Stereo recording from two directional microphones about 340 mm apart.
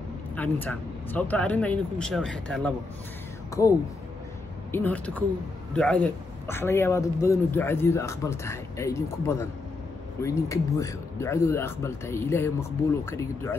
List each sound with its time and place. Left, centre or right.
0.4 s a man's voice: centre
4.7 s a man's voice: centre